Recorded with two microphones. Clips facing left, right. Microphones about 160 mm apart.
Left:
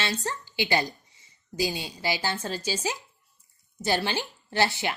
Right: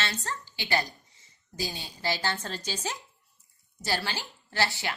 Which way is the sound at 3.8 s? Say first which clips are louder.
Left 5 dB; 20° left (ahead or behind).